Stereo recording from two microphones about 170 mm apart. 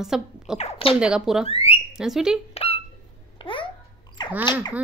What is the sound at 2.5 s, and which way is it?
Hiccup, 35° left (ahead or behind).